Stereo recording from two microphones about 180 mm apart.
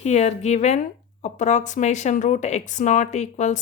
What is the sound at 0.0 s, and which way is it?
A woman's voice, 40° left (ahead or behind).